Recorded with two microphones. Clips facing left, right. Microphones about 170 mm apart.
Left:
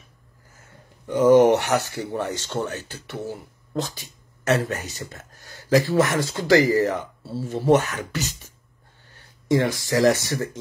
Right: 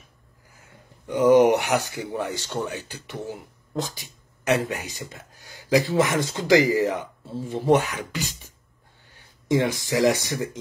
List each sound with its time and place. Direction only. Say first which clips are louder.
0.6 s speech: left 1 dB; 15° right (ahead or behind)